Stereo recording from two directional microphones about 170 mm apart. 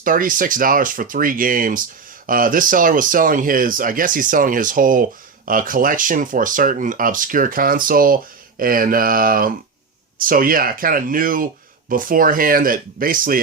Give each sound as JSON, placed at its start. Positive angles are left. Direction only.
{"t": 0.0, "sound": "speech", "side_deg": -50}